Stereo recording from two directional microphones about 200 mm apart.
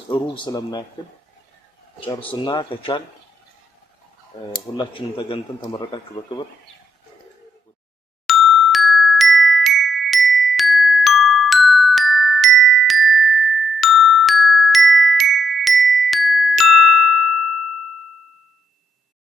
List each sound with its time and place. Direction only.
0.1 s speech: 20° left (ahead or behind)
2.3 s speech: 25° left (ahead or behind)
4.5 s speech: 25° left (ahead or behind)
8.3 s glockenspiel: centre (ahead or behind)